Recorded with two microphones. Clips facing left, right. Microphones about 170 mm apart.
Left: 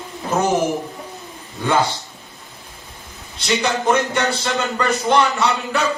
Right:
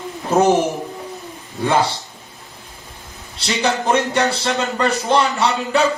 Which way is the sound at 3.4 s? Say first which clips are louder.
Even; 35° right (ahead or behind).